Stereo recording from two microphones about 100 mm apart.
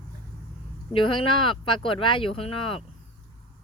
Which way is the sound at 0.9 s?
60° left (ahead or behind).